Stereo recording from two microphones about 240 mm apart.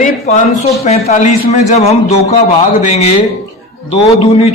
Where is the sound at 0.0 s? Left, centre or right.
Left.